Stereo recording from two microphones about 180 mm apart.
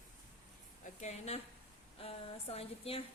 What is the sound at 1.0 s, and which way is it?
A woman's voice, 35° left (ahead or behind).